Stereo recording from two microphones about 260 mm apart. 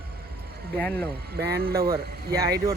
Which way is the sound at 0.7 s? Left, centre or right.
Centre.